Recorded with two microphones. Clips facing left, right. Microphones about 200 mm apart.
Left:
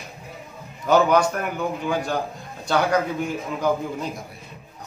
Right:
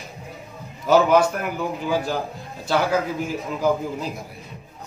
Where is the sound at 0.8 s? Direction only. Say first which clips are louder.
Right 1 dB; 5° right (ahead or behind).